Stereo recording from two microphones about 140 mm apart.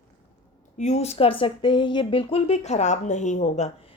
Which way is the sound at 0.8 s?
55° left (ahead or behind).